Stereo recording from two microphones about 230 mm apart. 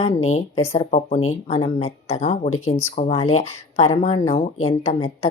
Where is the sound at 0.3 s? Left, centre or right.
Left.